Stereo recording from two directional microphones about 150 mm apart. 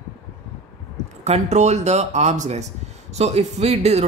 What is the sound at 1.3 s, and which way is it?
Speech, 50° right (ahead or behind).